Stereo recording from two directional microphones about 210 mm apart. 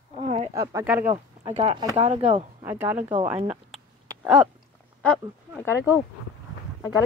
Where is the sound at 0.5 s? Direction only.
10° right (ahead or behind).